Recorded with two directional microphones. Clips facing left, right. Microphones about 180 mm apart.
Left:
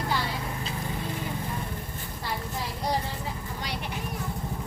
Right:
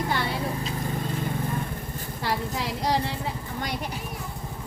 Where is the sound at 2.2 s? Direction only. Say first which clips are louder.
Right 5 dB; 90° right.